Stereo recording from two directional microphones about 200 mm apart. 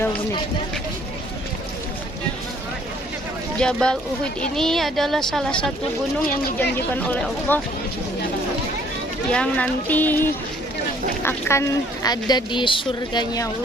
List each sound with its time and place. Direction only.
3.6 s a woman's voice: 5° left (ahead or behind)
9.3 s speech: 5° left (ahead or behind)